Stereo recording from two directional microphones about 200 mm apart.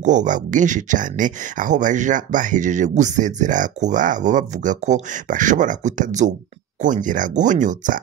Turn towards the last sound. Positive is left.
turn(degrees=-40)  # may be behind; listen again after turning